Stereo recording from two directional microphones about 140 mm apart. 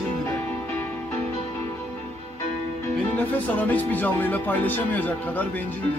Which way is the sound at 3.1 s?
10° left (ahead or behind).